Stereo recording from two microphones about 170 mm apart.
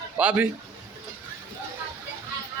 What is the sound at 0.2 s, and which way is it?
Speech, 5° right (ahead or behind).